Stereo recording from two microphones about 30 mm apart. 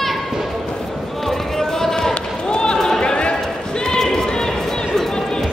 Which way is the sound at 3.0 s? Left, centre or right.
Left.